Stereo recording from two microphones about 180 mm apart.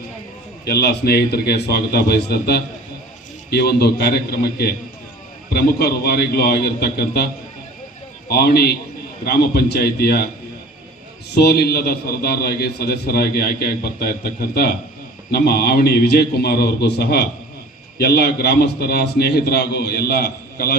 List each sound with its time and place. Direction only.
0.6 s a man's voice: 65° left (ahead or behind)
8.3 s a man's voice: 60° left (ahead or behind)
11.3 s a man's voice: 60° left (ahead or behind)
15.3 s a man's voice: 60° left (ahead or behind)